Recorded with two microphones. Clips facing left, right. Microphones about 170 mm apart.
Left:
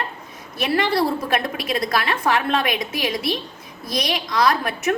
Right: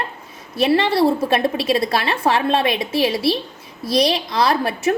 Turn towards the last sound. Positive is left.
turn(degrees=-30)  # may be behind; listen again after turning